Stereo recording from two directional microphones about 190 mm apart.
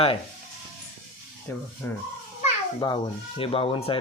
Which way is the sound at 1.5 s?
10° left (ahead or behind).